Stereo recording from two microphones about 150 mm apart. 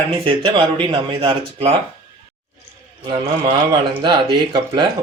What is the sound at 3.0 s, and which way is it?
Speech, 30° right (ahead or behind).